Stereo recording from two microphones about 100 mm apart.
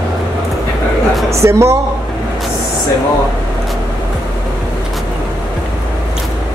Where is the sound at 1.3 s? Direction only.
30° right (ahead or behind).